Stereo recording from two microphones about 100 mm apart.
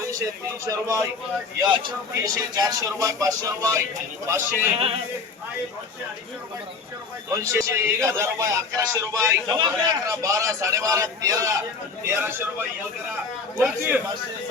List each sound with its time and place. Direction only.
0.1 s a man's voice: 35° right (ahead or behind)
2.2 s a man's voice: 35° right (ahead or behind)
4.3 s a man's voice: 20° right (ahead or behind)
7.3 s a man's voice: 30° right (ahead or behind)
9.5 s a man's voice: 40° right (ahead or behind)
12.0 s a man's voice: 25° right (ahead or behind)